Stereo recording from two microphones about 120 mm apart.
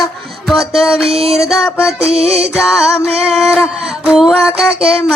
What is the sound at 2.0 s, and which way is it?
Music, 55° right (ahead or behind).